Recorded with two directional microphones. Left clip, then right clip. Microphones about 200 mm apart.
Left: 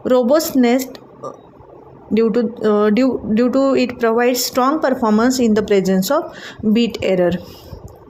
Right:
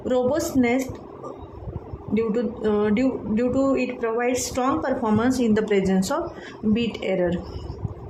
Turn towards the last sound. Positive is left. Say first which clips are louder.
# left 8 dB
turn(degrees=25)  # may be behind; listen again after turning